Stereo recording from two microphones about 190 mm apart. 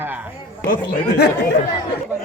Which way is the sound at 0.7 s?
50° left (ahead or behind).